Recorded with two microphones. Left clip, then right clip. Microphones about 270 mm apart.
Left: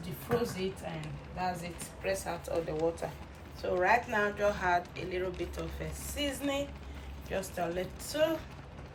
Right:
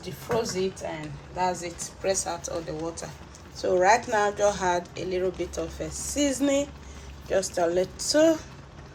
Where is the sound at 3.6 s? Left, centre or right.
Centre.